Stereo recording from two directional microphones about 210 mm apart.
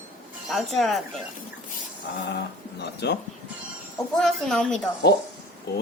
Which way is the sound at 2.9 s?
50° left (ahead or behind).